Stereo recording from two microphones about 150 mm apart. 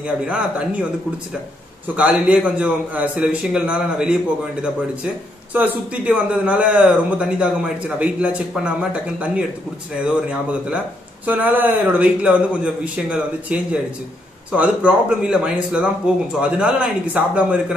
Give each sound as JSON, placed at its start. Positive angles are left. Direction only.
{"t": 0.0, "sound": "a man's voice", "side_deg": -10}
{"t": 2.0, "sound": "a man's voice", "side_deg": -10}
{"t": 11.2, "sound": "a man's voice", "side_deg": -10}